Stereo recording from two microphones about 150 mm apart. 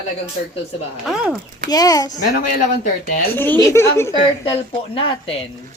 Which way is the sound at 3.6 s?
20° left (ahead or behind).